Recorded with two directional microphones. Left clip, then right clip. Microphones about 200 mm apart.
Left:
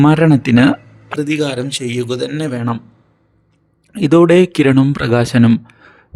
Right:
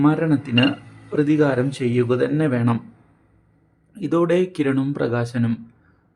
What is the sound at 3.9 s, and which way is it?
Speech, 40° left (ahead or behind).